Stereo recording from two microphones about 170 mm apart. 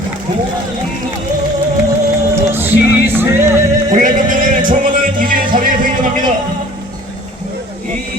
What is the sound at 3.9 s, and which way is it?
Music, 50° right (ahead or behind).